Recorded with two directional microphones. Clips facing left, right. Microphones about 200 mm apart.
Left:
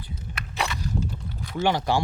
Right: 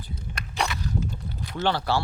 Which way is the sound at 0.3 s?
Centre (ahead or behind).